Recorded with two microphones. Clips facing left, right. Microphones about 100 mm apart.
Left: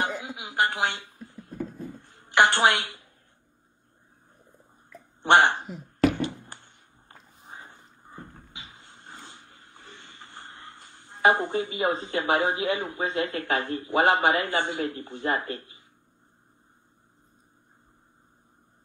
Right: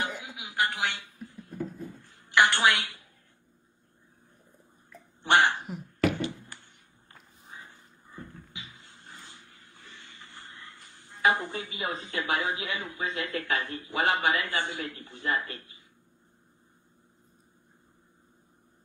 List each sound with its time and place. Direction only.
0.0 s throat clearing: 35° left (ahead or behind)
2.0 s a woman's voice: 35° left (ahead or behind)
5.2 s speech: 35° left (ahead or behind)
6.2 s a sound: 35° left (ahead or behind)